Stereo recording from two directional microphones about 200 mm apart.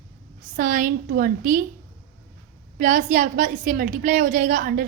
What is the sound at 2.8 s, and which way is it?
A woman's voice, 40° right (ahead or behind).